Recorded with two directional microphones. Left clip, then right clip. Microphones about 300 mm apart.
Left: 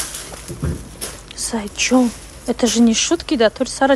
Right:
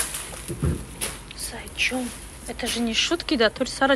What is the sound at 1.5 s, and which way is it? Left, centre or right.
A woman's voice, left.